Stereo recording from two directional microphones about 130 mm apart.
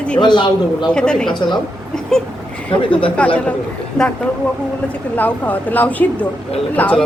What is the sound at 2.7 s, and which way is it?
Speech, 40° left (ahead or behind).